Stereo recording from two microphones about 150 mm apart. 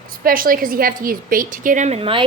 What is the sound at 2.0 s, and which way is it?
Speech, 35° right (ahead or behind).